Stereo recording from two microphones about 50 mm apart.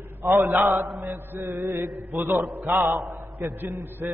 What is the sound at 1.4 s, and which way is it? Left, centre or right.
Mantra, right.